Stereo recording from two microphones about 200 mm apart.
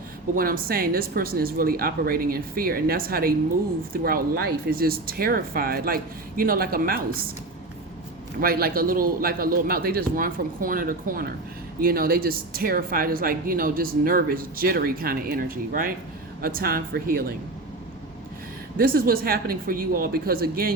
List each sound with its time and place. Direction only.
0.3 s speech: 45° right (ahead or behind)
8.4 s speech: 50° right (ahead or behind)
18.8 s speech: 45° right (ahead or behind)